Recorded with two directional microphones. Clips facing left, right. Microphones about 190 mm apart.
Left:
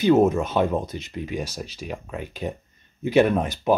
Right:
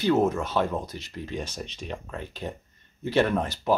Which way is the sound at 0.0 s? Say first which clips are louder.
Left 5 dB; 20° left (ahead or behind).